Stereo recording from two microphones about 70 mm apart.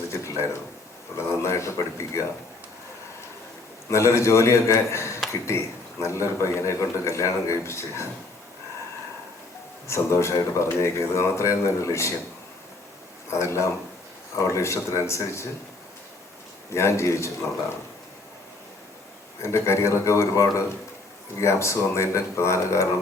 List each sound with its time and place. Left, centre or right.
0.1 s speech: left
3.8 s speech: left
9.8 s speech: left
13.3 s speech: left
16.6 s speech: left
19.4 s speech: left